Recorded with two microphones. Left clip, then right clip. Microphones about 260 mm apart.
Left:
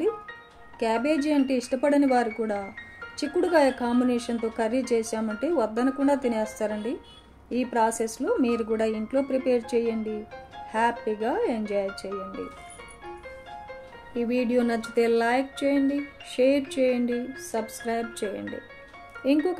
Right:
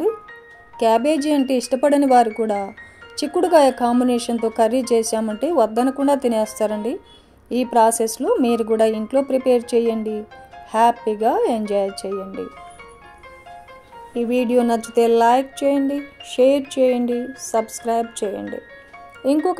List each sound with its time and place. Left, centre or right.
0.7 s a woman's voice: right
14.1 s speech: right